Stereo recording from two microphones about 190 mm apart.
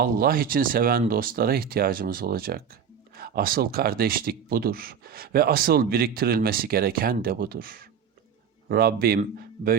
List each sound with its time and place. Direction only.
0.0 s speech: 50° right (ahead or behind)